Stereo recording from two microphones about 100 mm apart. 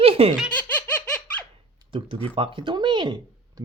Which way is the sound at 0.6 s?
15° left (ahead or behind).